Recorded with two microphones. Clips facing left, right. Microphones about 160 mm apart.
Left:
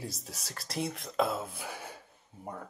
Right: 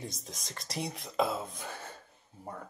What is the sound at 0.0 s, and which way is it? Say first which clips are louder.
Speech: left 1 dB; 5° left (ahead or behind).